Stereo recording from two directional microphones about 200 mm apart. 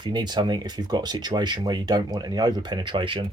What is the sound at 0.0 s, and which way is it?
Speech, 20° right (ahead or behind).